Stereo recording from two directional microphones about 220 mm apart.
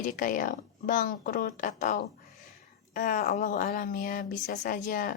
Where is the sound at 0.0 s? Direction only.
40° left (ahead or behind).